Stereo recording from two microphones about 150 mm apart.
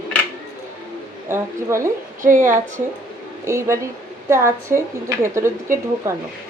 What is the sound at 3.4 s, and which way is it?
A woman's voice, 20° right (ahead or behind).